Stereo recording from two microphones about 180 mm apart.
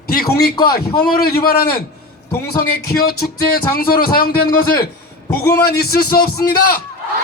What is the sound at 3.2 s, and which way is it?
A man's voice, 55° left (ahead or behind).